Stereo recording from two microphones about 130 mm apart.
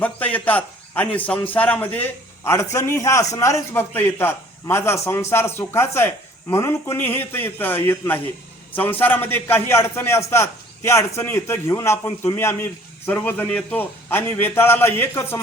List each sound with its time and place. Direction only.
0.0 s a man's voice: 10° left (ahead or behind)